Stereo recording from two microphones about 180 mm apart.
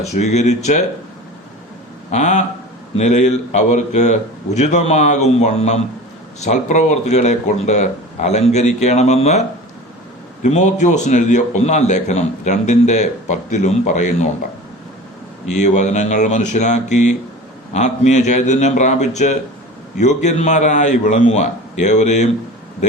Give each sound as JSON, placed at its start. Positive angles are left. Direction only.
{"t": 0.0, "sound": "a man's voice", "side_deg": 40}
{"t": 2.0, "sound": "a man's voice", "side_deg": 40}
{"t": 10.4, "sound": "a man's voice", "side_deg": 40}
{"t": 15.5, "sound": "a man's voice", "side_deg": 40}